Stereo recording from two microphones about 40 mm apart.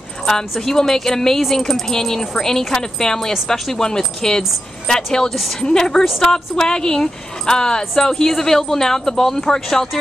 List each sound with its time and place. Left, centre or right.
0.3 s speech: centre